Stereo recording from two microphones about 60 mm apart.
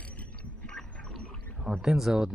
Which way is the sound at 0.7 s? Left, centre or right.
Centre.